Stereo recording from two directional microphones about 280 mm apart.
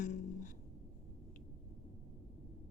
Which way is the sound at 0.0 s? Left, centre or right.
Left.